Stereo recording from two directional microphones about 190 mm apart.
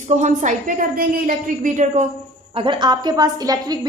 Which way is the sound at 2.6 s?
25° right (ahead or behind).